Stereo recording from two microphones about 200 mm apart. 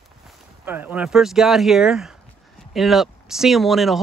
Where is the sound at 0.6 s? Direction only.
10° right (ahead or behind).